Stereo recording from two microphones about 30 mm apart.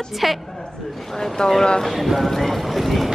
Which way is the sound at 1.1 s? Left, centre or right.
Centre.